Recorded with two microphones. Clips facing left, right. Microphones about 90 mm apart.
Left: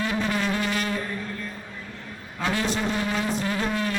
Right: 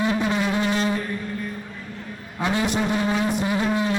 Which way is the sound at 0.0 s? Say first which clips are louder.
Right 4 dB; 20° right (ahead or behind).